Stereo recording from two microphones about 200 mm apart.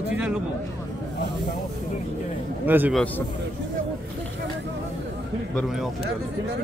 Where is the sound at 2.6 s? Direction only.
10° right (ahead or behind).